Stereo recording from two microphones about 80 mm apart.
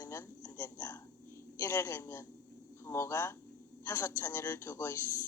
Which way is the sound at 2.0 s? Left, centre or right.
Left.